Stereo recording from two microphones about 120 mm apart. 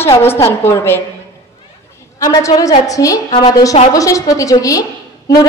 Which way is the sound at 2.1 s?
30° left (ahead or behind).